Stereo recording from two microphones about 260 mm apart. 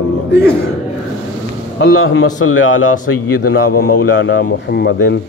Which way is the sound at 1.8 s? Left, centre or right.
Left.